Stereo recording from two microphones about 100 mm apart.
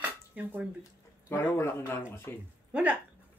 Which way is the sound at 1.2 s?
25° left (ahead or behind).